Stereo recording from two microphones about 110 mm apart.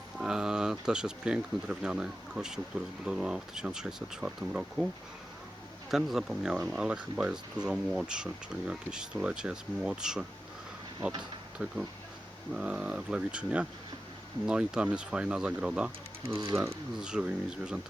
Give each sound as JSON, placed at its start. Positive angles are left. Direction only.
{"t": 0.2, "sound": "speech", "side_deg": -5}
{"t": 5.9, "sound": "speech", "side_deg": -5}
{"t": 16.5, "sound": "speech", "side_deg": -20}
{"t": 17.0, "sound": "speech", "side_deg": -5}